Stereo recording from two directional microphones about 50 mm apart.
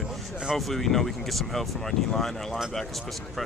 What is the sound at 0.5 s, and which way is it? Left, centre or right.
Speech, centre.